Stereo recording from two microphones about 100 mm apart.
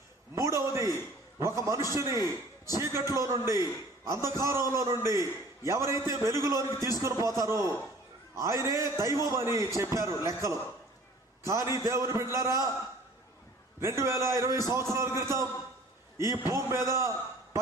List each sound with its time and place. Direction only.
0.3 s a sound: 30° right (ahead or behind)
1.9 s a man's voice: 30° right (ahead or behind)
13.8 s a man's voice: 30° right (ahead or behind)